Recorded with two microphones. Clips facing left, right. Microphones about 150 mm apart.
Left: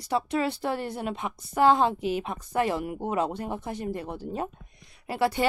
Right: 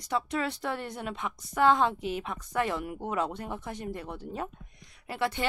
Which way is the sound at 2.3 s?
30° left (ahead or behind).